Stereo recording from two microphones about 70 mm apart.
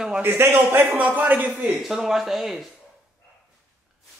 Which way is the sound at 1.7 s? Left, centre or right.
Centre.